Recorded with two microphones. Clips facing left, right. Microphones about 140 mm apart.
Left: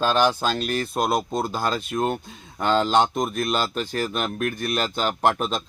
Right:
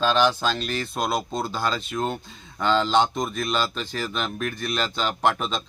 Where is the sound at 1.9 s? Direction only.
10° left (ahead or behind).